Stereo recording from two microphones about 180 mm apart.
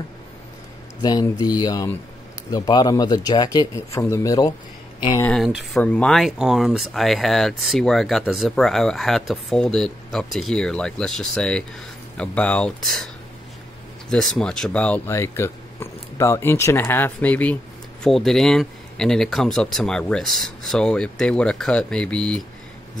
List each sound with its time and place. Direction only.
1.0 s speech: 20° left (ahead or behind)
5.2 s speech: centre (ahead or behind)
14.1 s speech: 5° left (ahead or behind)